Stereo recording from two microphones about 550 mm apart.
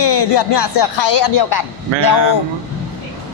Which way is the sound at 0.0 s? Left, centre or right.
Left.